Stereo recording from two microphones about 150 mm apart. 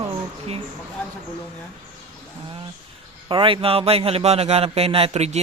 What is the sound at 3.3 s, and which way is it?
Speech, 35° right (ahead or behind).